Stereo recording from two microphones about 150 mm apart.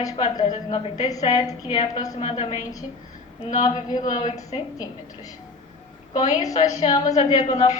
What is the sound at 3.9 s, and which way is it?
Speech, 25° left (ahead or behind).